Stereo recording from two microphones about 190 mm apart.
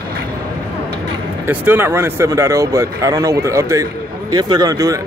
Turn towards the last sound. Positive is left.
turn(degrees=-20)  # may be behind; listen again after turning